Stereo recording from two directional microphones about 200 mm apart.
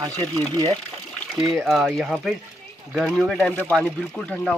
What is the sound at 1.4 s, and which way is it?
Speech, centre (ahead or behind).